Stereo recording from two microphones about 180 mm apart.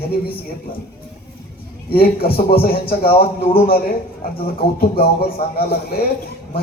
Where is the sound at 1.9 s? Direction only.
55° left (ahead or behind).